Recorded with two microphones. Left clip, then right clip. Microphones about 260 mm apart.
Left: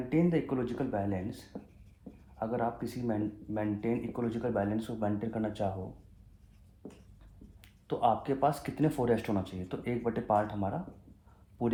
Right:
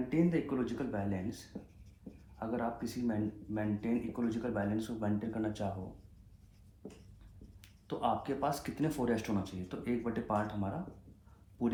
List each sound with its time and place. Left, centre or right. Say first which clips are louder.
0.1 s speech: left 4 dB; left
2.4 s speech: left 4 dB; left
7.6 s speech: left 6 dB; left